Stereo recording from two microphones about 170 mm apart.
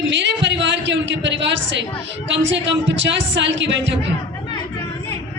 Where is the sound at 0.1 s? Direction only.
90° right.